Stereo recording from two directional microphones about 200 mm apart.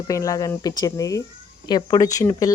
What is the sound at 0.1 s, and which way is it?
Speech, 15° left (ahead or behind).